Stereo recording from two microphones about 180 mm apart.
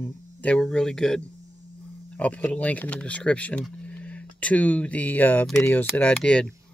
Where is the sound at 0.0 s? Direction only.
10° left (ahead or behind).